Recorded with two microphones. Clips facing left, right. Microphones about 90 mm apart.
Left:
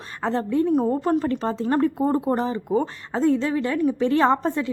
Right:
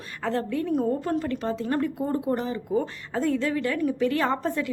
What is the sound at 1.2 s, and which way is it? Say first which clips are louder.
Speech: left 4 dB; 35° left (ahead or behind).